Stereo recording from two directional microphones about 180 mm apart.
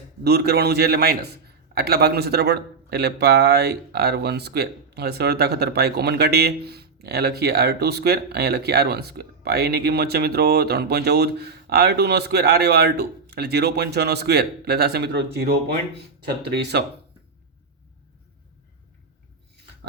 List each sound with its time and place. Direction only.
0.3 s a man's voice: 65° right (ahead or behind)